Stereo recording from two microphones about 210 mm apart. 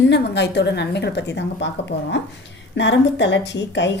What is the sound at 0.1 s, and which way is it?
A woman's voice, 55° left (ahead or behind).